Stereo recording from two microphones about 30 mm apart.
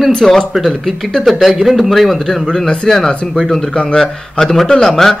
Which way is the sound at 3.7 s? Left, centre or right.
Left.